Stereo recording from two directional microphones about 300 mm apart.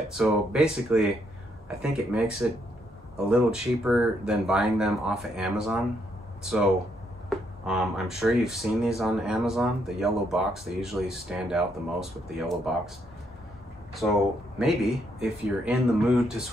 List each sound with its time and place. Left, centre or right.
0.2 s speech: centre
7.2 s speech: centre
13.9 s speech: centre